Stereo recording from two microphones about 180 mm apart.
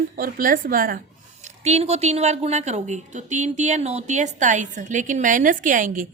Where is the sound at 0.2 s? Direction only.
50° right (ahead or behind).